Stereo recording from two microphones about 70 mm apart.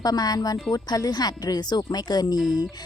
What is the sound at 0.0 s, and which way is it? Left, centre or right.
Speech, left.